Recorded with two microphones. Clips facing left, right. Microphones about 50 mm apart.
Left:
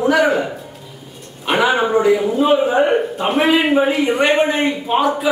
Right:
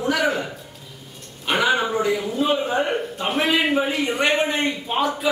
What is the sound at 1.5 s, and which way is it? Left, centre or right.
A man's voice, centre.